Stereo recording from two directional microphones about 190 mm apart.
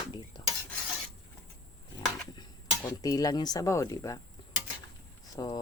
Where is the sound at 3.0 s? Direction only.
20° left (ahead or behind).